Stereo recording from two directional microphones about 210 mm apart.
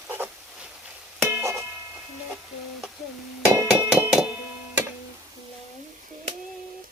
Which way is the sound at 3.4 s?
10° right (ahead or behind).